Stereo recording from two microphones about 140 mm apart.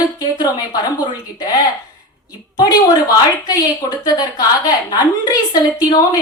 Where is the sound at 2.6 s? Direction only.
25° left (ahead or behind).